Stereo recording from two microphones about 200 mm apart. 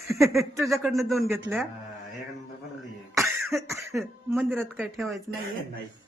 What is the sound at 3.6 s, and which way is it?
Speech, 15° right (ahead or behind).